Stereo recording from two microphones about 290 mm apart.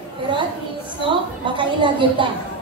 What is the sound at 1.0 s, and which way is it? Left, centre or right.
A woman's voice, centre.